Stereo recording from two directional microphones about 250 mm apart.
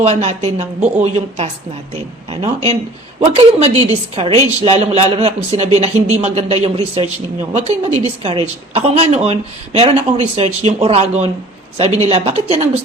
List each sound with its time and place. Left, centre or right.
0.0 s a man's voice: right
3.2 s a man's voice: right